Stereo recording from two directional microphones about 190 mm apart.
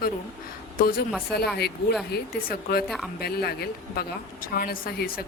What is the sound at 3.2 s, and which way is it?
A woman's voice, 55° left (ahead or behind).